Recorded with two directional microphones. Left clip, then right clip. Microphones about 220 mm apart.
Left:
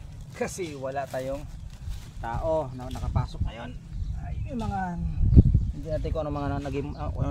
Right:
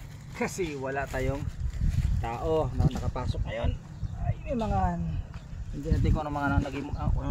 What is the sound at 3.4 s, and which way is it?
Speech, 20° left (ahead or behind).